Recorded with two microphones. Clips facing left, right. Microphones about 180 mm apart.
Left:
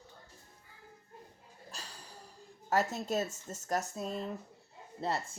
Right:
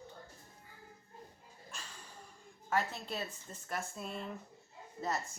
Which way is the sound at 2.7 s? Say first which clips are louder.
Left 5 dB; 45° left (ahead or behind).